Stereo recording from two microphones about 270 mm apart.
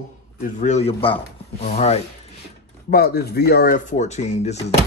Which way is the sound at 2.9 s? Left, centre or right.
Left.